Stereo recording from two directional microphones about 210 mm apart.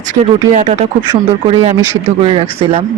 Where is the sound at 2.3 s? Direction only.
30° right (ahead or behind).